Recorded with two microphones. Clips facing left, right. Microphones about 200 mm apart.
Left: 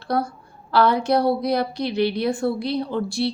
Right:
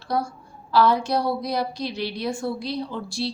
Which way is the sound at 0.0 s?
60° left (ahead or behind).